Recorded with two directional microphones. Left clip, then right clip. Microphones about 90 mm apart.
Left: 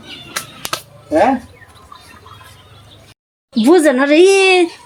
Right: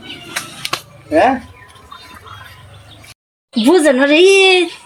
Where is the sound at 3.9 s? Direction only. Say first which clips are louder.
Right 1 dB; 30° left (ahead or behind).